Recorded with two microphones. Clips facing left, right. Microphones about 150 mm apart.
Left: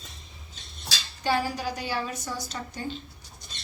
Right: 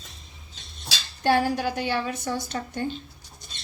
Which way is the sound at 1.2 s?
60° right (ahead or behind).